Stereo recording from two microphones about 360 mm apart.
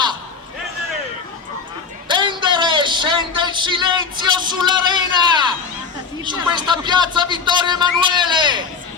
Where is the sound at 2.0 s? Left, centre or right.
Centre.